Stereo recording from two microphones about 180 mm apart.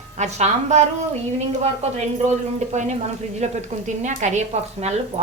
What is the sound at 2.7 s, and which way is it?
Speech, 40° right (ahead or behind).